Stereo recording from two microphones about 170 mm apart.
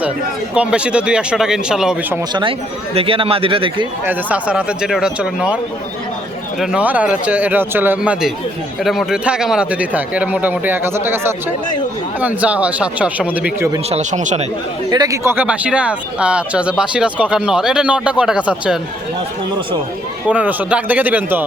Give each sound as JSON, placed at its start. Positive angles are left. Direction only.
{"t": 0.5, "sound": "speech", "side_deg": -5}
{"t": 2.3, "sound": "speech", "side_deg": -30}
{"t": 4.0, "sound": "speech", "side_deg": -10}
{"t": 6.6, "sound": "speech", "side_deg": -5}
{"t": 13.9, "sound": "speech", "side_deg": -45}
{"t": 14.8, "sound": "speech", "side_deg": -20}
{"t": 20.2, "sound": "speech", "side_deg": -10}